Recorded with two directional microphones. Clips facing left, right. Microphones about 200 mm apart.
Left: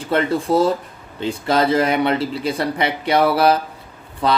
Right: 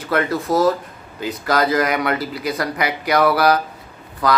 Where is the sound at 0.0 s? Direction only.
30° left (ahead or behind).